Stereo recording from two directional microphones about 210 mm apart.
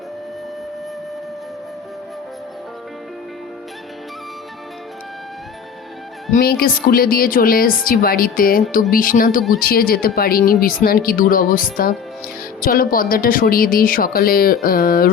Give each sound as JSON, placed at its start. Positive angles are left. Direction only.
{"t": 6.3, "sound": "speech", "side_deg": 45}